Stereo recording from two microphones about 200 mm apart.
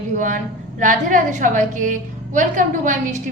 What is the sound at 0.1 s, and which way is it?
A woman's voice, 40° right (ahead or behind).